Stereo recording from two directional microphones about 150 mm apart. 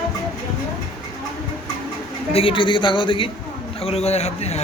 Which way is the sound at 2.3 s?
35° left (ahead or behind).